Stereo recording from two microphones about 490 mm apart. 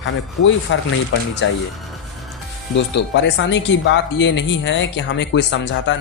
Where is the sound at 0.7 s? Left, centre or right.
Left.